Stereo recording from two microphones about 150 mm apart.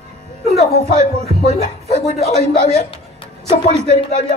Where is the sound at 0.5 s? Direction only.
45° left (ahead or behind).